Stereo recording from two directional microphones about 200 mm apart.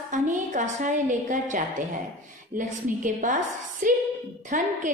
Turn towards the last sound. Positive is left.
turn(degrees=-40)  # may be behind; listen again after turning